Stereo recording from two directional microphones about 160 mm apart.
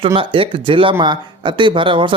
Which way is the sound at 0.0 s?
35° right (ahead or behind).